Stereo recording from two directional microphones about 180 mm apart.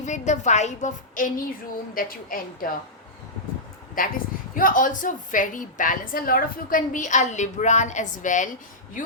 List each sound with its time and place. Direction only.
0.0 s a woman's voice: 40° left (ahead or behind)
4.0 s a woman's voice: 50° left (ahead or behind)